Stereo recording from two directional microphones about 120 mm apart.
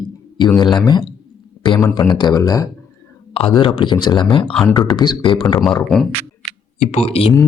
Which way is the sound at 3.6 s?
40° left (ahead or behind).